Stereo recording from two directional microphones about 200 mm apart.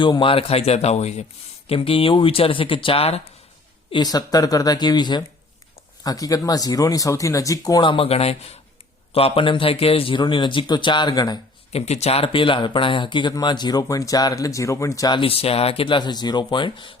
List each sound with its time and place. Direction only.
0.0 s speech: 25° left (ahead or behind)
3.9 s speech: 20° left (ahead or behind)
11.9 s speech: 30° left (ahead or behind)